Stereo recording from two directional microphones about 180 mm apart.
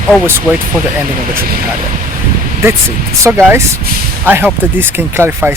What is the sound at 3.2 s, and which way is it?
Speech, 10° right (ahead or behind).